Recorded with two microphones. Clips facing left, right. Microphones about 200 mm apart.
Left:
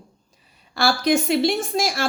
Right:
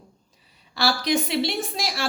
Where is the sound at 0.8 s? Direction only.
50° left (ahead or behind).